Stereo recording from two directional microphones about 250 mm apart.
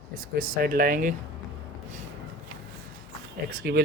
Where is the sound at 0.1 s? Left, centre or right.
Right.